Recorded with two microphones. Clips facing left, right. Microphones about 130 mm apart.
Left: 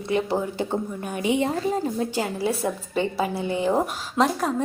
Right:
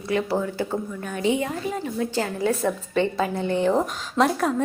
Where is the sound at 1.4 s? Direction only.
35° left (ahead or behind).